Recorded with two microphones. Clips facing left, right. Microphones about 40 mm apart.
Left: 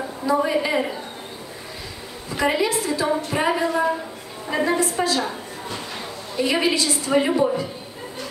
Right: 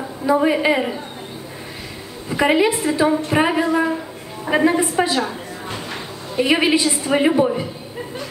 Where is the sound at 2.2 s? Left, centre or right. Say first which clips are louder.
Right 5 dB; right.